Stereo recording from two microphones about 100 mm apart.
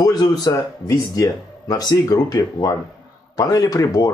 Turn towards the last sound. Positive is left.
turn(degrees=40)  # may be behind; listen again after turning